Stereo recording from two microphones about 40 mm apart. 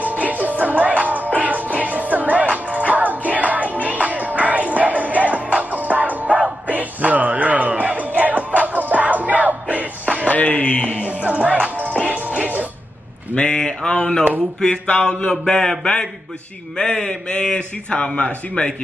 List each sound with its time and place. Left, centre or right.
0.0 s music: right
10.3 s music: left
11.1 s music: right
13.3 s a sound: left
14.6 s a man's voice: left